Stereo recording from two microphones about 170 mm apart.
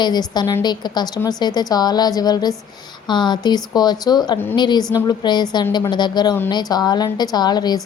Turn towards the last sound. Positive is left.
turn(degrees=25)  # may be behind; listen again after turning